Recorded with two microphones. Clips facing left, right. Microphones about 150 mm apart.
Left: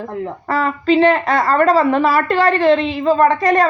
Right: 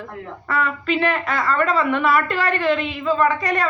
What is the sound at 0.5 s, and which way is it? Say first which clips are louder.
A woman's voice: left 7 dB; 35° left (ahead or behind).